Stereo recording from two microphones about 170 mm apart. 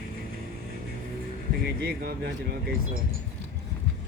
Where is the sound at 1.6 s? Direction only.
65° right (ahead or behind).